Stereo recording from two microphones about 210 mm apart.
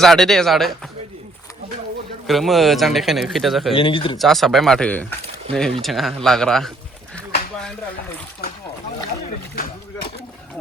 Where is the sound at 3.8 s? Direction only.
25° left (ahead or behind).